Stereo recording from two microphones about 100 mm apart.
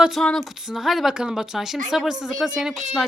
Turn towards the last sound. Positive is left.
turn(degrees=-5)  # may be behind; listen again after turning